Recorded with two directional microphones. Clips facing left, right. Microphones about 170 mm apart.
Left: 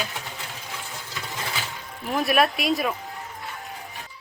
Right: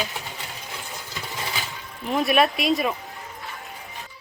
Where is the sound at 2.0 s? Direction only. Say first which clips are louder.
Right 1 dB; centre (ahead or behind).